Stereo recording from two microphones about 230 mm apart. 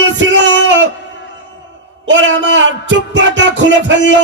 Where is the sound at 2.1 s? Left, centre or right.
Right.